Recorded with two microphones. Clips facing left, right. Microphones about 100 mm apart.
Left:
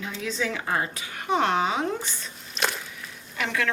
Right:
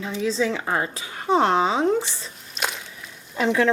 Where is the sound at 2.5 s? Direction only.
Centre (ahead or behind).